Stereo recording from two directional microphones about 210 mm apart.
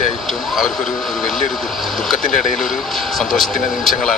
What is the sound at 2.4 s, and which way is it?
Speech, centre (ahead or behind).